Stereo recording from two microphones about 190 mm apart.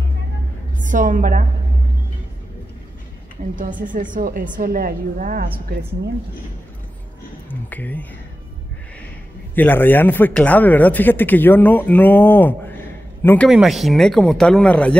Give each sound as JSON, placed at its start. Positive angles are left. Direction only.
{"t": 0.7, "sound": "a woman's voice", "side_deg": -45}
{"t": 3.5, "sound": "a woman's voice", "side_deg": -45}
{"t": 7.4, "sound": "speech", "side_deg": 10}
{"t": 9.6, "sound": "a man's voice", "side_deg": 10}
{"t": 13.5, "sound": "speech", "side_deg": 0}